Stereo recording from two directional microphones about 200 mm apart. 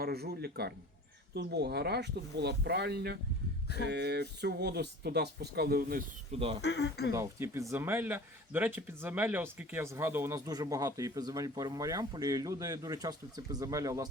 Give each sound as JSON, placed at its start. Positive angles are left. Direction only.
{"t": 0.0, "sound": "a man's voice", "side_deg": -50}
{"t": 6.6, "sound": "speech", "side_deg": 55}
{"t": 7.1, "sound": "speech", "side_deg": -15}